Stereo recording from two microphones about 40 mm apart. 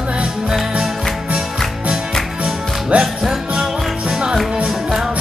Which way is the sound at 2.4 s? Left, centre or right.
Right.